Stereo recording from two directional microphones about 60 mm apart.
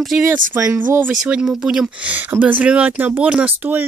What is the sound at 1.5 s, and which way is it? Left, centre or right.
Speech, centre.